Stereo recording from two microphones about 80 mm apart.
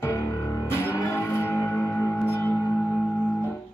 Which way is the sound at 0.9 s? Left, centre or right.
Left.